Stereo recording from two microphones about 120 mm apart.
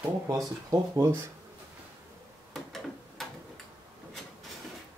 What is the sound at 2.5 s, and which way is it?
Tick-tock, centre (ahead or behind).